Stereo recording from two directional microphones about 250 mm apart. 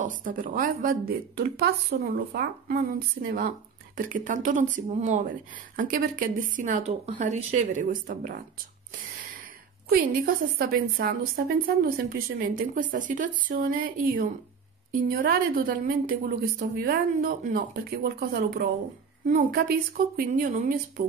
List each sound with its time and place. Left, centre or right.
0.0 s a woman's voice: right
9.8 s a woman's voice: right